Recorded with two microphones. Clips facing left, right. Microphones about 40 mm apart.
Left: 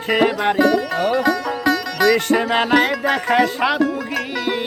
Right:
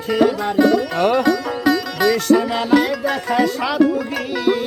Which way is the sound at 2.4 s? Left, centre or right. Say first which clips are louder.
Even; left.